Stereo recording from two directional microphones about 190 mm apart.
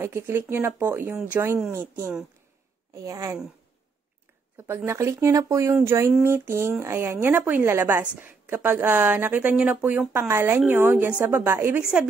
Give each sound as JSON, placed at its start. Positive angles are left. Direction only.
{"t": 0.0, "sound": "a woman's voice", "side_deg": -10}
{"t": 4.6, "sound": "a woman's voice", "side_deg": -15}